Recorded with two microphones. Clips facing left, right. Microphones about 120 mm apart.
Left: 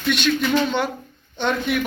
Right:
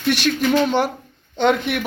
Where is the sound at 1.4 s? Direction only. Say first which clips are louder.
Right 4 dB; 65° right (ahead or behind).